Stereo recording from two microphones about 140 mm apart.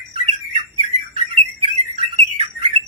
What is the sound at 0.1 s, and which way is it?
Bird, 40° right (ahead or behind).